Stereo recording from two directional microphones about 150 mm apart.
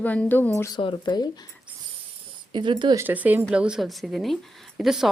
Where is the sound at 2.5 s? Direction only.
30° right (ahead or behind).